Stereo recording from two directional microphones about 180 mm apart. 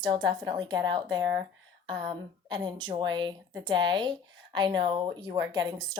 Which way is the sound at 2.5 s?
25° right (ahead or behind).